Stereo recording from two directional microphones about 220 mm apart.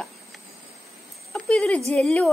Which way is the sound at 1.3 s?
5° left (ahead or behind).